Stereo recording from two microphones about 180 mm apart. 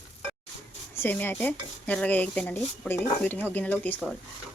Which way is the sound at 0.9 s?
10° left (ahead or behind).